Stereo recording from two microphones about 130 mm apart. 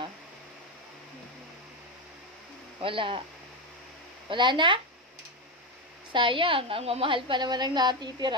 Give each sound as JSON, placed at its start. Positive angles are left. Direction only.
{"t": 2.8, "sound": "a woman's voice", "side_deg": -40}
{"t": 4.3, "sound": "a woman's voice", "side_deg": -40}
{"t": 6.1, "sound": "a woman's voice", "side_deg": -40}